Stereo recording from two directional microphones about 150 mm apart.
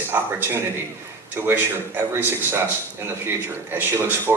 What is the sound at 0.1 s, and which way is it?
Speech, 15° right (ahead or behind).